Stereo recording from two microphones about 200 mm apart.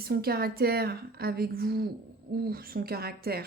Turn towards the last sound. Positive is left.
turn(degrees=-50)  # may be behind; listen again after turning